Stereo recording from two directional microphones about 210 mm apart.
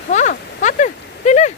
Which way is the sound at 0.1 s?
35° left (ahead or behind).